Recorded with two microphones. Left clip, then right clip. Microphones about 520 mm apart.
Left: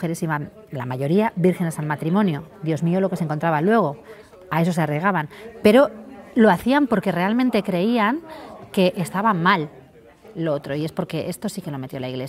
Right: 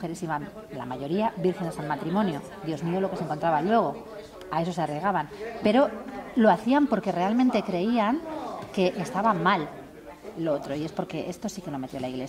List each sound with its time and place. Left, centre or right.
0.0 s a woman's voice: left